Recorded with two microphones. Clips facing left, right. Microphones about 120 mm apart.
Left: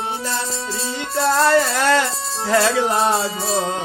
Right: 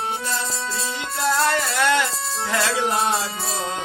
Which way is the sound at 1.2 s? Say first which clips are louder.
Left 5 dB; 40° left (ahead or behind).